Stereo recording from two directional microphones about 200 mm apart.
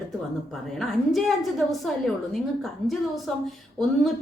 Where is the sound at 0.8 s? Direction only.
Centre (ahead or behind).